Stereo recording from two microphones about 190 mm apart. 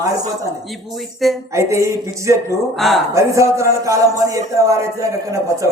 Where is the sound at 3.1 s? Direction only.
15° right (ahead or behind).